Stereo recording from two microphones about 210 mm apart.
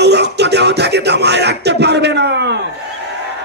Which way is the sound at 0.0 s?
55° right (ahead or behind).